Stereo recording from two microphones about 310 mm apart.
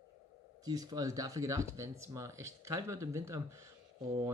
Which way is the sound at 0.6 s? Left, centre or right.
Centre.